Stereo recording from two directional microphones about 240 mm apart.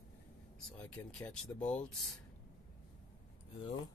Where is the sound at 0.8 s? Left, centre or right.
Centre.